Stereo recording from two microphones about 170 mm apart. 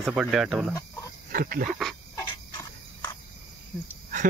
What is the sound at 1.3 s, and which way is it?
Speech, 55° right (ahead or behind).